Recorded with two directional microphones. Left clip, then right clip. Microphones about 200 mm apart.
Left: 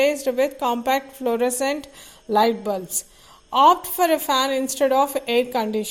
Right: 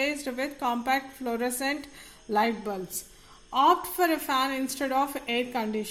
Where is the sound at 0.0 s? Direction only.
35° left (ahead or behind).